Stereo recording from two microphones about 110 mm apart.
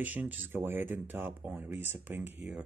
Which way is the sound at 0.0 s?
15° right (ahead or behind).